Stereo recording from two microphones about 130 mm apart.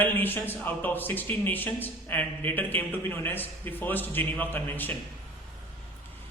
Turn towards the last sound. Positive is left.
turn(degrees=15)  # may be behind; listen again after turning